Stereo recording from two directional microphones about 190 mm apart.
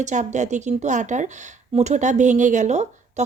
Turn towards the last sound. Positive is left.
turn(degrees=-35)  # may be behind; listen again after turning